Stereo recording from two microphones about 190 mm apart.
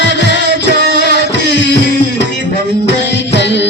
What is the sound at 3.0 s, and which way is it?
Music, 65° left (ahead or behind).